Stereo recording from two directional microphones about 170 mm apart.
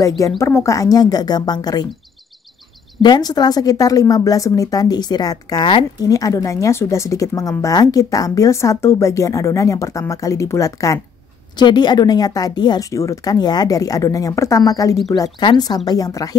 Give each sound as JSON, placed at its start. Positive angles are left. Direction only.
{"t": 0.4, "sound": "speech", "side_deg": 15}
{"t": 3.0, "sound": "speech", "side_deg": 25}